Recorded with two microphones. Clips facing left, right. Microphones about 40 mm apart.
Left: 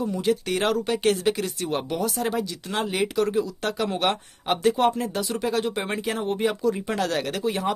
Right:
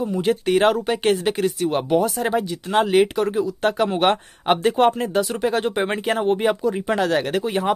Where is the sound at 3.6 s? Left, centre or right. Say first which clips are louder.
Right 6 dB; right.